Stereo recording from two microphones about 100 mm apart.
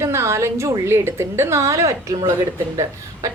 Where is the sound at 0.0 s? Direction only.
30° right (ahead or behind).